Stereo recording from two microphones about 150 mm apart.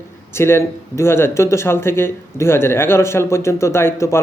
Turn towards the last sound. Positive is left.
turn(degrees=15)  # may be behind; listen again after turning